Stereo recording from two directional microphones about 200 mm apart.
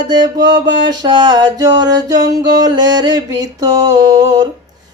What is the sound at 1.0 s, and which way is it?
Music, 20° right (ahead or behind).